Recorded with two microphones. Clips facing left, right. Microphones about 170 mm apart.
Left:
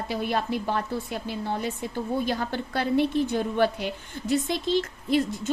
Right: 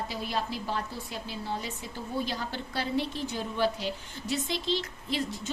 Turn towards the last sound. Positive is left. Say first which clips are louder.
# left 8 dB
turn(degrees=50)  # may be behind; listen again after turning